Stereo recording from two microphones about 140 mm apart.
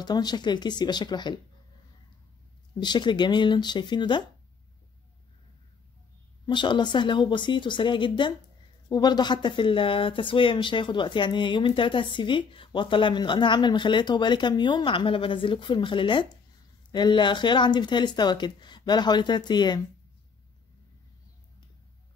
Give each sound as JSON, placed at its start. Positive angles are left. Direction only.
{"t": 0.0, "sound": "speech", "side_deg": 30}
{"t": 2.8, "sound": "speech", "side_deg": 30}
{"t": 6.4, "sound": "speech", "side_deg": 35}